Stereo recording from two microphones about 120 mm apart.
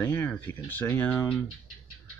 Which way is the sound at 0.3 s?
15° left (ahead or behind).